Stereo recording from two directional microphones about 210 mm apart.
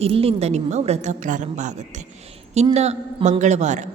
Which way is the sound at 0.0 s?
30° right (ahead or behind).